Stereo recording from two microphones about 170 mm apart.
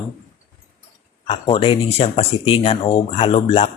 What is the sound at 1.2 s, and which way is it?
Speech, 35° left (ahead or behind).